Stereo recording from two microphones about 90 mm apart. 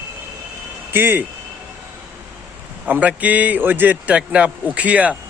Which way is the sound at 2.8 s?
15° right (ahead or behind).